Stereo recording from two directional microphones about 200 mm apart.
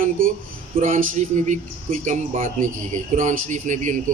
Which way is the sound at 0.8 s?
40° right (ahead or behind).